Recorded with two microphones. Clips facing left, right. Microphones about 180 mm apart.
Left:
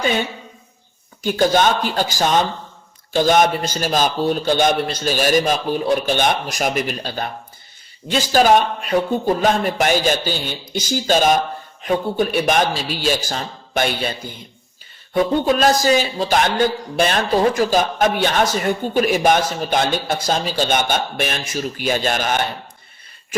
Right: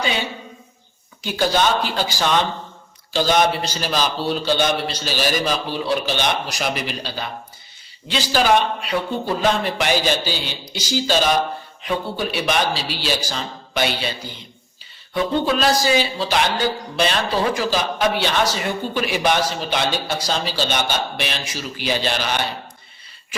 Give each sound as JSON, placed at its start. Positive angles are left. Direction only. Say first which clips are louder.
{"t": 1.5, "sound": "a man's voice", "louder": "left 2 dB", "side_deg": 50}